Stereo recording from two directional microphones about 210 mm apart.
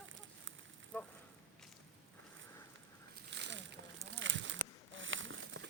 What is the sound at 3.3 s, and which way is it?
Slosh, 60° right (ahead or behind).